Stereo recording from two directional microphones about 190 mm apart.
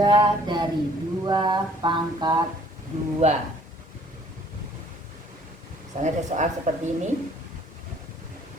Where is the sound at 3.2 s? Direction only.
35° right (ahead or behind).